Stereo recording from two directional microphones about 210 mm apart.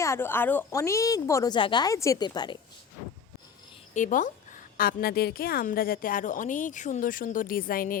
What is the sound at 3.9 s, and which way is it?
A woman's voice, 35° left (ahead or behind).